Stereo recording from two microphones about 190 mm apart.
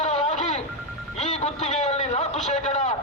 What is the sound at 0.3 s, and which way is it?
Telephone, 40° left (ahead or behind).